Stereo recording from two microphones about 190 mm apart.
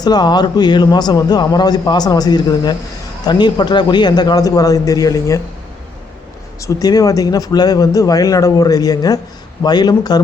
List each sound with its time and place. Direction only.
0.0 s a man's voice: 20° left (ahead or behind)
6.6 s a man's voice: 20° left (ahead or behind)